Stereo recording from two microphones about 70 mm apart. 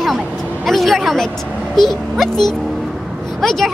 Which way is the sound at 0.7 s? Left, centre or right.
Centre.